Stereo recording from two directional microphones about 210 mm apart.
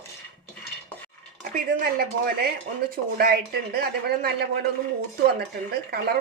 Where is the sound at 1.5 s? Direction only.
45° right (ahead or behind).